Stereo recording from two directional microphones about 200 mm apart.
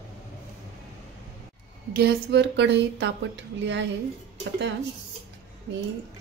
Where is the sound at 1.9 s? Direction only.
55° right (ahead or behind).